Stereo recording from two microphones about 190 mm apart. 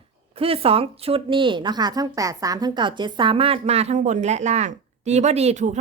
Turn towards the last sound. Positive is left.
turn(degrees=-40)  # may be behind; listen again after turning